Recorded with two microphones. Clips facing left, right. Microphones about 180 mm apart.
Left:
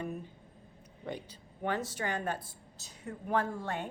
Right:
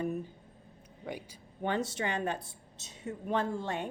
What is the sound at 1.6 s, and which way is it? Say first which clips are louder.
A woman's voice: right 2 dB; 25° right (ahead or behind).